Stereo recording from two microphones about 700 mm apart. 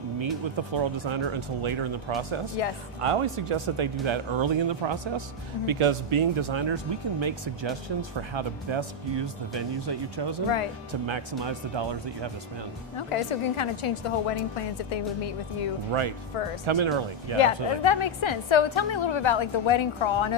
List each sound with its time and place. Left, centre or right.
0.2 s speech: right
13.0 s a woman's voice: left
15.9 s speech: right
17.3 s a woman's voice: left